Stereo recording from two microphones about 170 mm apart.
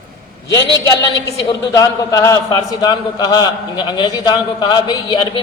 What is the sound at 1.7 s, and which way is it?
A man's voice, 20° left (ahead or behind).